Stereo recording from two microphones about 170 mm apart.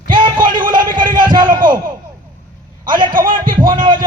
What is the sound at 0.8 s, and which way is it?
Speech, 55° right (ahead or behind).